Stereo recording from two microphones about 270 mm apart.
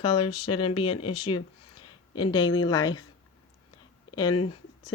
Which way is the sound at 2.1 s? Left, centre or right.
Centre.